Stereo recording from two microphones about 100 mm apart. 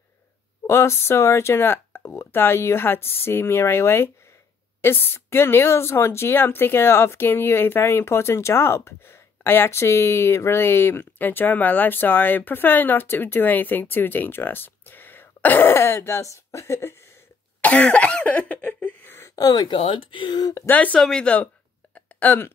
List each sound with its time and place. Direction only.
0.7 s speech: 25° left (ahead or behind)
17.6 s cough: 15° left (ahead or behind)
19.3 s speech: 40° left (ahead or behind)
20.6 s speech: 15° left (ahead or behind)
21.9 s a sound: 20° left (ahead or behind)